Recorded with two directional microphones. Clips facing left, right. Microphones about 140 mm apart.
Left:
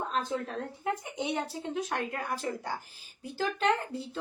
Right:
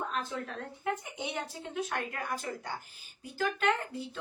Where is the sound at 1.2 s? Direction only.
30° left (ahead or behind).